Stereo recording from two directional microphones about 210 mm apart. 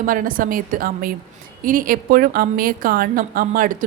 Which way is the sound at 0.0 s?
40° right (ahead or behind).